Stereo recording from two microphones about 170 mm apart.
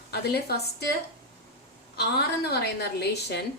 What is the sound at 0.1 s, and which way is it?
Speech, 70° left (ahead or behind).